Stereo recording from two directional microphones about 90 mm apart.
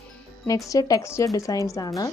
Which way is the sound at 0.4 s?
40° left (ahead or behind).